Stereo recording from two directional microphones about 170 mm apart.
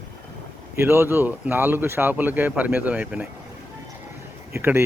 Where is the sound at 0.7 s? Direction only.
15° right (ahead or behind).